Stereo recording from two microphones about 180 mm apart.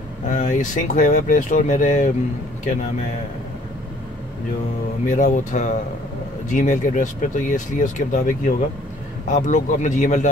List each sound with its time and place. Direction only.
0.3 s speech: 45° left (ahead or behind)
5.0 s speech: 45° left (ahead or behind)